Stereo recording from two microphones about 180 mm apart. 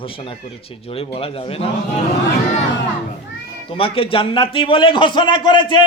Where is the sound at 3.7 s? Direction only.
30° left (ahead or behind).